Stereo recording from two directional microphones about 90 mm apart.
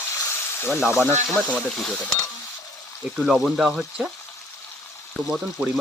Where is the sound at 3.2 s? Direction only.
Centre (ahead or behind).